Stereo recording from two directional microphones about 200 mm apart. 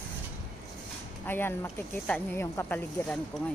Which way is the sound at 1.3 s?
10° left (ahead or behind).